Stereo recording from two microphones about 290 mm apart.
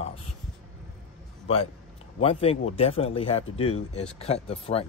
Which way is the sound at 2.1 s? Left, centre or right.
Centre.